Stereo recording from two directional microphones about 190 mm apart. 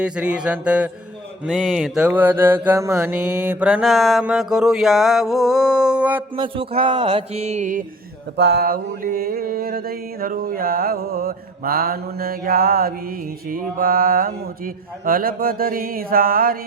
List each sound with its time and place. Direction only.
0.0 s mantra: 5° right (ahead or behind)
6.3 s mantra: 30° right (ahead or behind)
8.4 s mantra: 60° right (ahead or behind)